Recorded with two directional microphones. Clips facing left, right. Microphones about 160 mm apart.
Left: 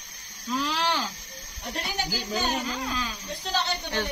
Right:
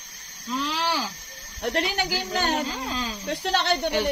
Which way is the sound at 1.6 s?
75° right (ahead or behind).